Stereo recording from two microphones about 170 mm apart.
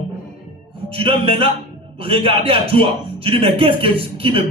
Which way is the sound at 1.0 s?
35° right (ahead or behind).